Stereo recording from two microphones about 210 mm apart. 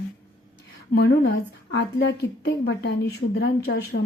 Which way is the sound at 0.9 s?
50° left (ahead or behind).